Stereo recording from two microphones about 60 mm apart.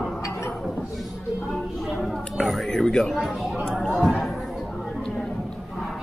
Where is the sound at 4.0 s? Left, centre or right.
Centre.